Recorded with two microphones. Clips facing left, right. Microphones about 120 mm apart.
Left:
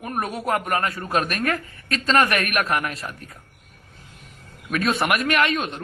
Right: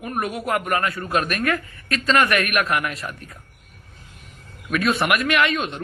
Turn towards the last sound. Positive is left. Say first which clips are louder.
# right 1 dB
turn(degrees=40)  # may be behind; listen again after turning